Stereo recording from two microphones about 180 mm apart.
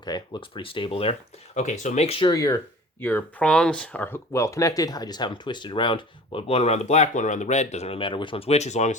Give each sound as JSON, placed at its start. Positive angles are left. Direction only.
{"t": 0.0, "sound": "speech", "side_deg": 25}
{"t": 2.3, "sound": "speech", "side_deg": 20}